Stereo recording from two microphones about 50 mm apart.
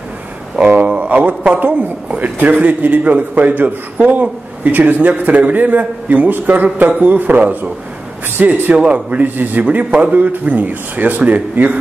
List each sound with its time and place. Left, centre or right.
0.8 s a man's voice: right
8.7 s a man's voice: right